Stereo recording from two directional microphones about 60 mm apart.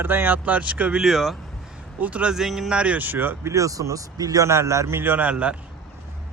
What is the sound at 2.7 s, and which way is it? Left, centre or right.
Speech, centre.